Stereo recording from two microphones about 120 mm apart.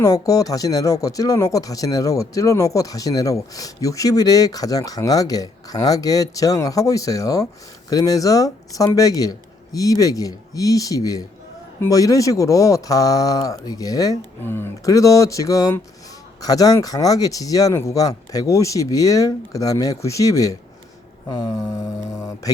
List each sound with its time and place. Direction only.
0.0 s speech: 30° left (ahead or behind)
14.4 s speech: 20° left (ahead or behind)